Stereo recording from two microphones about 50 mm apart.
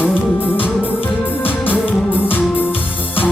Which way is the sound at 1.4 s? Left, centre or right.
Left.